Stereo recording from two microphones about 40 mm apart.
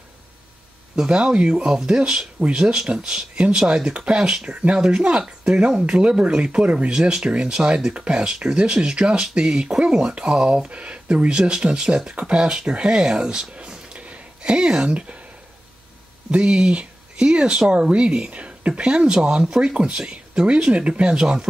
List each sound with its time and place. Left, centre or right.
1.1 s speech: right
4.7 s speech: centre
6.9 s speech: centre
13.9 s a sound: right
16.3 s speech: right